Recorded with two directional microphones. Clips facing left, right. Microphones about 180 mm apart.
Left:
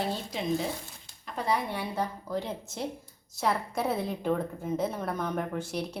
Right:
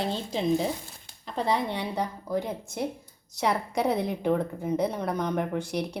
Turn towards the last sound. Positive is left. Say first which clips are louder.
# right 3 dB
turn(degrees=-15)  # may be behind; listen again after turning